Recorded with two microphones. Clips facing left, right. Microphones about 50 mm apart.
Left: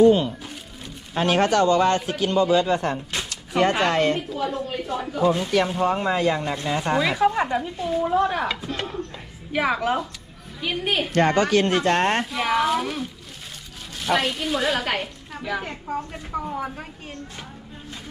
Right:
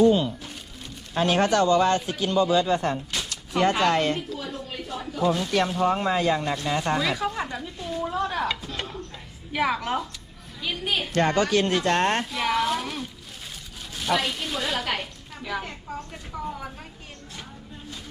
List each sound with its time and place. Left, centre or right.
1.1 s a man's voice: left
3.1 s speech: left
7.8 s a child's voice: centre
10.6 s speech: left
11.5 s a man's voice: left
11.9 s speech: left
12.3 s a woman's voice: centre
15.6 s speech: left